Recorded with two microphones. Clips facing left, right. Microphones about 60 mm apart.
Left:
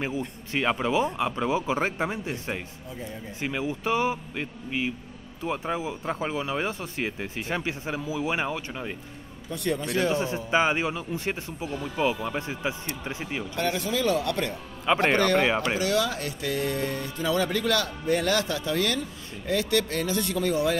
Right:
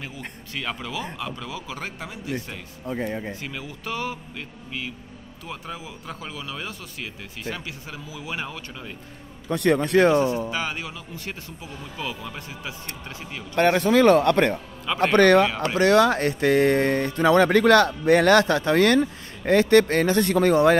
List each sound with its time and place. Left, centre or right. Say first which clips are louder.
0.5 s speech: left 6 dB; left
2.9 s speech: right 11 dB; right
3.3 s speech: left 6 dB; left
9.5 s speech: right 8 dB; right
10.5 s speech: left 6 dB; left
13.6 s speech: right 10 dB; right
14.9 s speech: left 1 dB; left
15.1 s speech: right 7 dB; right
15.8 s speech: right 8 dB; right